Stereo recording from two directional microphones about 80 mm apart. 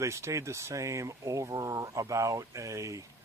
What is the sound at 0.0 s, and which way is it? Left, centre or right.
Speech, right.